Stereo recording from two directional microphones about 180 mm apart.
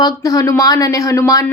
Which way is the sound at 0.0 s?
20° left (ahead or behind).